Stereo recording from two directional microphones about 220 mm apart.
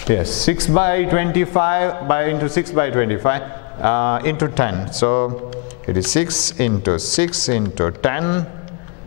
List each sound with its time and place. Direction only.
0.4 s a man's voice: 10° left (ahead or behind)